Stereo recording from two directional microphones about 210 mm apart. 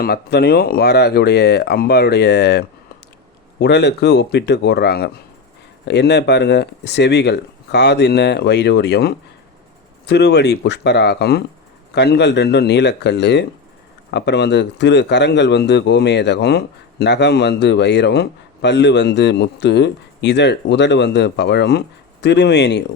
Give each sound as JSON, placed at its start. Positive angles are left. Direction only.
{"t": 0.0, "sound": "a man's voice", "side_deg": 50}